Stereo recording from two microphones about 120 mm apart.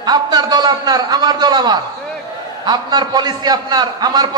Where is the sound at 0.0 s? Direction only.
35° right (ahead or behind).